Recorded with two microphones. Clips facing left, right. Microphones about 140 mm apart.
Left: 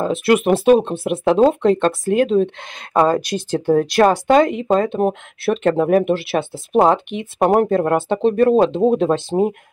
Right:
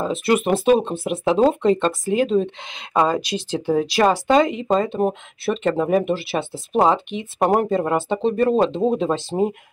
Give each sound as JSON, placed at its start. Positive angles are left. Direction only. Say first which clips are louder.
{"t": 0.0, "sound": "speech", "louder": "left 4 dB", "side_deg": 0}
{"t": 3.3, "sound": "speech", "louder": "left 4 dB", "side_deg": 50}
{"t": 3.7, "sound": "speech", "louder": "left 4 dB", "side_deg": 0}